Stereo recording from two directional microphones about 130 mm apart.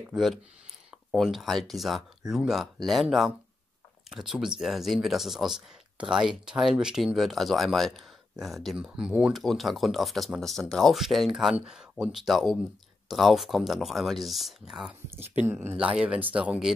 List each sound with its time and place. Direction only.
0.1 s speech: centre (ahead or behind)
15.0 s speech: 15° right (ahead or behind)